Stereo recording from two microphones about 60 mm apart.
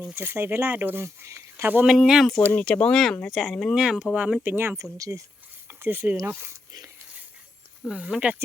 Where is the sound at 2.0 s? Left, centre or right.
Centre.